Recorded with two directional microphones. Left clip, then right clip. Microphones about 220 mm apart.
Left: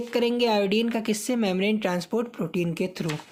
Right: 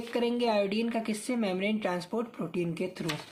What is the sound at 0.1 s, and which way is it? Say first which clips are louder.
Speech: left 5 dB; 40° left (ahead or behind).